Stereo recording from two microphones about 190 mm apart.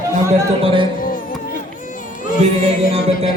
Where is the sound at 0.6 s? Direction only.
30° right (ahead or behind).